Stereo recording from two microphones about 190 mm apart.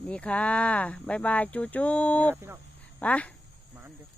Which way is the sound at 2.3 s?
15° right (ahead or behind).